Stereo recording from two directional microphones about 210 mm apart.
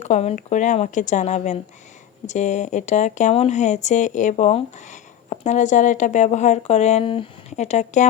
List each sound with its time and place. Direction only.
0.0 s speech: 30° left (ahead or behind)